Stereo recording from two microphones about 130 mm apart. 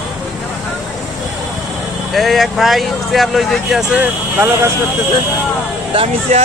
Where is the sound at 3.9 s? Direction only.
15° right (ahead or behind).